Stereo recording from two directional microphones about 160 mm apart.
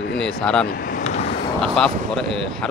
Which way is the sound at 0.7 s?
55° left (ahead or behind).